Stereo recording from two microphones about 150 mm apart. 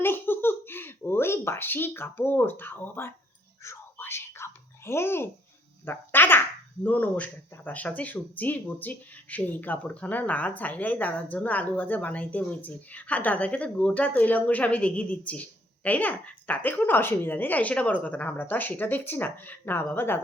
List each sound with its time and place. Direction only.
0.0 s speech: 15° left (ahead or behind)
3.6 s whispering: 15° left (ahead or behind)
5.8 s speech: 15° left (ahead or behind)